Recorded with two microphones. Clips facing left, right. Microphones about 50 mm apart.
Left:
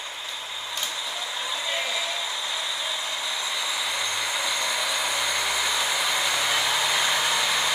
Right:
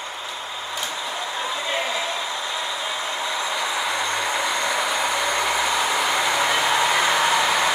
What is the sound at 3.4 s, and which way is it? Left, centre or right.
Vehicle, right.